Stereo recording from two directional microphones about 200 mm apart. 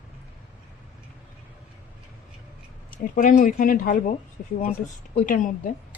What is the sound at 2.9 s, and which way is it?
Speech, 45° left (ahead or behind).